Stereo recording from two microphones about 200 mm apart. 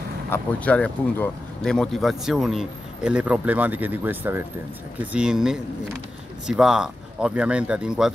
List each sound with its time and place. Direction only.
0.3 s speech: 5° left (ahead or behind)